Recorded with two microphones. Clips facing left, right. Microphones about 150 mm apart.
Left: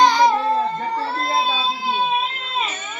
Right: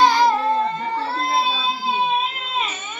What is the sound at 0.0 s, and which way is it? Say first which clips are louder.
Child singing: left 1 dB; 5° right (ahead or behind).